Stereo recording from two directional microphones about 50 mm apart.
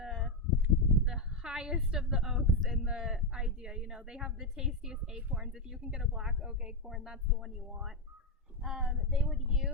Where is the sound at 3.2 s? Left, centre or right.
Centre.